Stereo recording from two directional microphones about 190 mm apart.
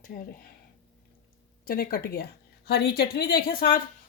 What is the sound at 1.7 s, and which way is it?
A woman's voice, 50° left (ahead or behind).